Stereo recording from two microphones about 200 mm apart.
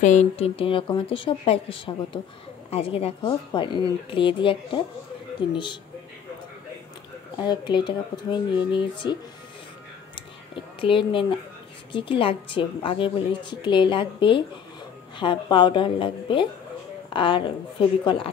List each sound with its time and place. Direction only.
0.0 s a woman's voice: 35° left (ahead or behind)
7.3 s a woman's voice: 25° left (ahead or behind)
10.8 s a woman's voice: 25° left (ahead or behind)